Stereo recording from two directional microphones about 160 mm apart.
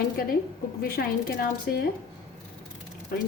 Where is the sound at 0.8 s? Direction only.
70° left (ahead or behind).